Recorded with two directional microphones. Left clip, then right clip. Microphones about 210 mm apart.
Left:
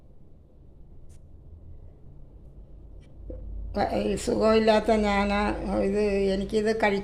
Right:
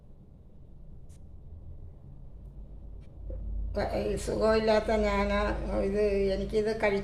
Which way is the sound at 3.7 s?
45° left (ahead or behind).